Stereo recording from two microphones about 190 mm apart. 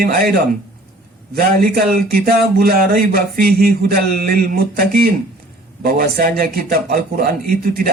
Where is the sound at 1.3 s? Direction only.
50° right (ahead or behind).